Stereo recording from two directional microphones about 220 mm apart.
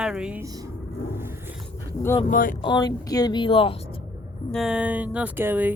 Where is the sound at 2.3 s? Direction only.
40° left (ahead or behind).